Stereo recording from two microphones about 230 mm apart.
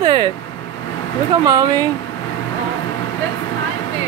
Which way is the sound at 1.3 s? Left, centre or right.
Centre.